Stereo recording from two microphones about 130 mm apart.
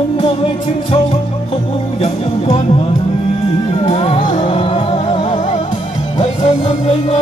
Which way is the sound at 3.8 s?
50° left (ahead or behind).